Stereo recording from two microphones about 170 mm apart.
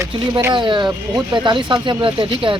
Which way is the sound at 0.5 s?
30° right (ahead or behind).